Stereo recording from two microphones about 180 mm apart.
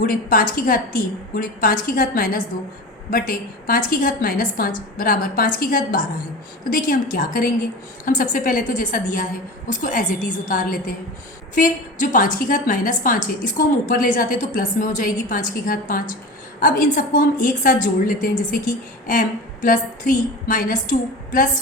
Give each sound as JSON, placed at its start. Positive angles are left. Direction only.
{"t": 0.0, "sound": "a woman's voice", "side_deg": 55}